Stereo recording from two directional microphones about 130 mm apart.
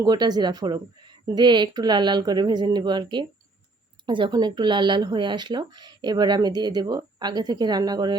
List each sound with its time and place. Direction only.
0.0 s speech: 30° right (ahead or behind)